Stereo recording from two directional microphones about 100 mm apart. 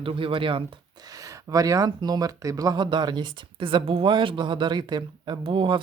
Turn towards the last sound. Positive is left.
turn(degrees=-60)  # may be behind; listen again after turning